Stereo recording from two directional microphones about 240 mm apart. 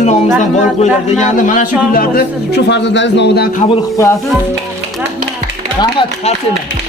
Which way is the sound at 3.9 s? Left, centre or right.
Centre.